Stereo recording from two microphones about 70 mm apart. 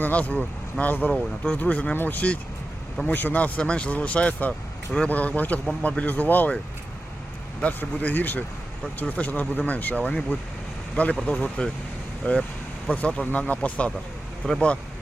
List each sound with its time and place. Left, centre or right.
0.0 s speech: left
7.6 s speech: left